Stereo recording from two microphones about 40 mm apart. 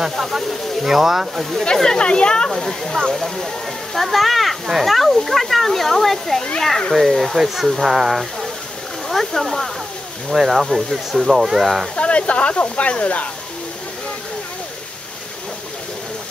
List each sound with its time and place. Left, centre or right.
0.1 s speech: centre
1.6 s speech: centre
2.5 s speech: centre
3.0 s speech: centre
3.9 s a child's voice: centre
9.1 s a sound: centre
10.3 s speech: centre
11.9 s speech: left